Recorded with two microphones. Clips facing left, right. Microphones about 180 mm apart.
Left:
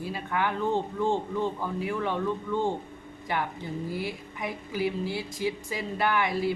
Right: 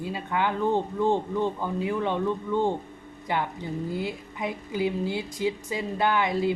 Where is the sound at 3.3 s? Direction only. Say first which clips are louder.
Right 2 dB; 20° right (ahead or behind).